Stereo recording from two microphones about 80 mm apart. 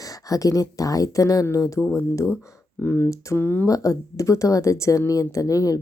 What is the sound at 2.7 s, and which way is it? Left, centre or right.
Speech, left.